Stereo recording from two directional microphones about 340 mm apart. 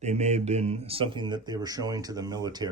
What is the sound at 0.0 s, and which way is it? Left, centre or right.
Speech, centre.